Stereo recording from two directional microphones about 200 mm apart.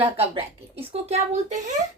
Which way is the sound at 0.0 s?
25° right (ahead or behind).